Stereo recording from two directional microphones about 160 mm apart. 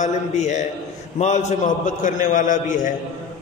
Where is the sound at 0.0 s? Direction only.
50° left (ahead or behind).